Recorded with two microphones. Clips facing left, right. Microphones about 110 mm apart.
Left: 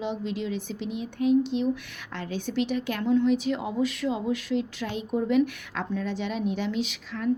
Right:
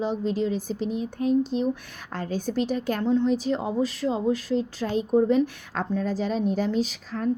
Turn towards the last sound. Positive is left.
turn(degrees=-40)  # may be behind; listen again after turning